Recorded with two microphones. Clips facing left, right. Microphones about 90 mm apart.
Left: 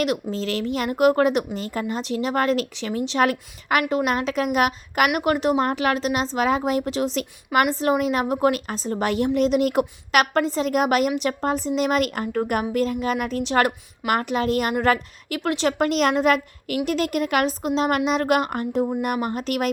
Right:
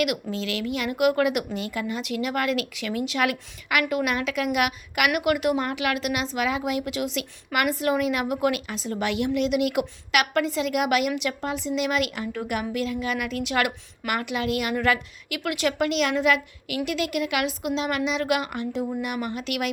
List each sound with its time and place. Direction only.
0.0 s a woman's voice: 35° left (ahead or behind)